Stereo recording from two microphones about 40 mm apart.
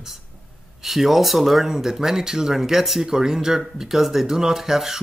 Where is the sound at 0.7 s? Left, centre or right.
Centre.